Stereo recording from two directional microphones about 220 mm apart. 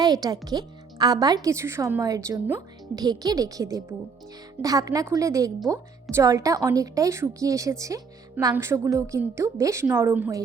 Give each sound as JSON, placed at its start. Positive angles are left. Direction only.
{"t": 0.0, "sound": "a woman's voice", "side_deg": -15}